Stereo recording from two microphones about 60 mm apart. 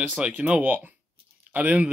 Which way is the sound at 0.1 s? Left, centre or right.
Right.